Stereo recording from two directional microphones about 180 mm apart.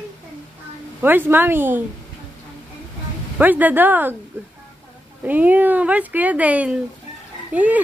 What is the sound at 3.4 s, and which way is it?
Speech, 10° right (ahead or behind).